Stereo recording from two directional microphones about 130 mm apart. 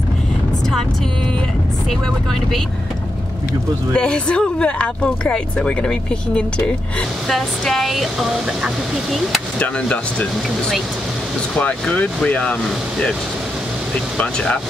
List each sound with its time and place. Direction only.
3.9 s speech: 5° left (ahead or behind)
9.6 s speech: 10° left (ahead or behind)
11.5 s speech: 10° left (ahead or behind)